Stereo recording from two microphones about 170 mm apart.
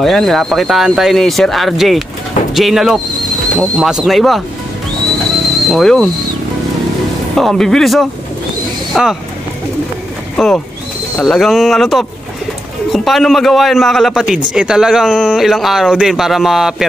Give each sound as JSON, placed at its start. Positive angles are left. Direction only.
{"t": 0.0, "sound": "speech", "side_deg": 0}
{"t": 3.1, "sound": "a sound", "side_deg": -25}
{"t": 3.5, "sound": "speech", "side_deg": 0}
{"t": 5.7, "sound": "speech", "side_deg": 0}
{"t": 7.3, "sound": "speech", "side_deg": 0}
{"t": 10.3, "sound": "speech", "side_deg": 0}